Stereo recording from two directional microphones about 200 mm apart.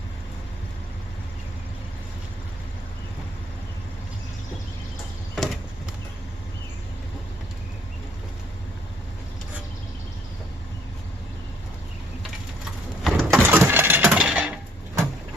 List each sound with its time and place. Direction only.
13.0 s coin: centre (ahead or behind)